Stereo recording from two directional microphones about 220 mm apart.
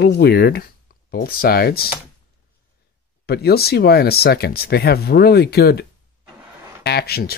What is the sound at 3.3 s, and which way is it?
Speech, 45° left (ahead or behind).